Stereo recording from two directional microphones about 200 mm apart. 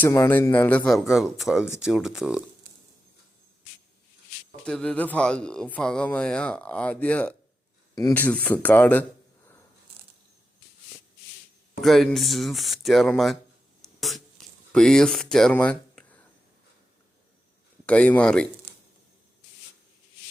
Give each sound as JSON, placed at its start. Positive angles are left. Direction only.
{"t": 0.0, "sound": "speech", "side_deg": 15}
{"t": 4.6, "sound": "speech", "side_deg": 5}
{"t": 11.8, "sound": "speech", "side_deg": 0}
{"t": 14.0, "sound": "a sound", "side_deg": 0}
{"t": 17.8, "sound": "speech", "side_deg": 5}